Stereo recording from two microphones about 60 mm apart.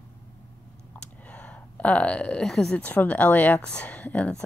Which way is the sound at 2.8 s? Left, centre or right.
Left.